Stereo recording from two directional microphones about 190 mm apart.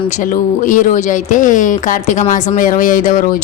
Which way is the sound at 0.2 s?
45° left (ahead or behind).